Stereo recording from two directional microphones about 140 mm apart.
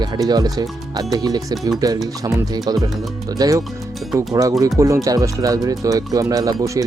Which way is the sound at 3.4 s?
25° right (ahead or behind).